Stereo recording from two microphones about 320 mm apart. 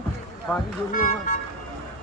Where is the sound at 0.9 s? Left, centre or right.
Left.